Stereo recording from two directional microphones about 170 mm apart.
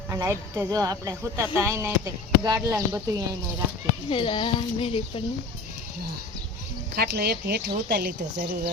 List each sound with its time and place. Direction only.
0.1 s speech: 15° right (ahead or behind)
4.1 s speech: 30° left (ahead or behind)
6.9 s speech: 70° right (ahead or behind)